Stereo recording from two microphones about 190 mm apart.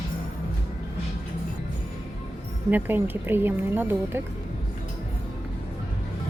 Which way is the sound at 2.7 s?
10° right (ahead or behind).